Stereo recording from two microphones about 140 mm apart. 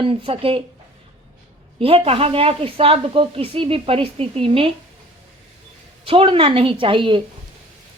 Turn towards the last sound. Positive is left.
turn(degrees=-35)  # may be behind; listen again after turning